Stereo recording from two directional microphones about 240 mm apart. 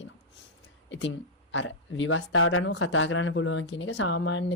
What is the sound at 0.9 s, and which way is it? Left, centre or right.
Speech, left.